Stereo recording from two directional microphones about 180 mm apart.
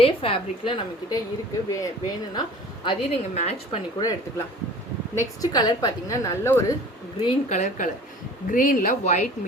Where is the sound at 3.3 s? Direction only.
35° left (ahead or behind).